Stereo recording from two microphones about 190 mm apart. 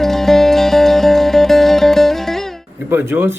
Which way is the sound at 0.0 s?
Centre (ahead or behind).